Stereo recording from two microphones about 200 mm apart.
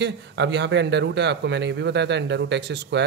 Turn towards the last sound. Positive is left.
turn(degrees=-60)  # may be behind; listen again after turning